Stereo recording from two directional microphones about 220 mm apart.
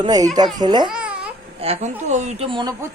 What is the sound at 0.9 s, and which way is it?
Babbling, 5° right (ahead or behind).